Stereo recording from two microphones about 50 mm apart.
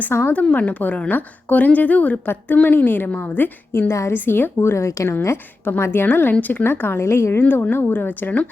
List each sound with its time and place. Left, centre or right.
0.1 s speech: left
0.5 s a woman's voice: left
2.2 s a woman's voice: left
4.7 s a woman's voice: left
5.8 s speech: left
7.4 s a woman's voice: left